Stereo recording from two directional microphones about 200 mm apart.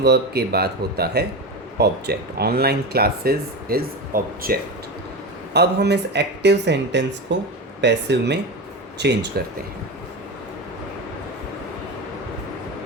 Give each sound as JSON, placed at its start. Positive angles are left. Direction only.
{"t": 0.0, "sound": "speech", "side_deg": -55}